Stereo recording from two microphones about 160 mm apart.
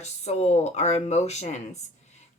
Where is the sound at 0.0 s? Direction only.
45° left (ahead or behind).